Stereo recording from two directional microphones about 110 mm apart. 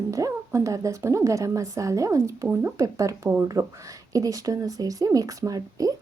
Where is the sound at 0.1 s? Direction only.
30° right (ahead or behind).